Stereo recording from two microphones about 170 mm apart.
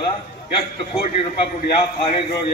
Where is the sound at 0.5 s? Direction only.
35° left (ahead or behind).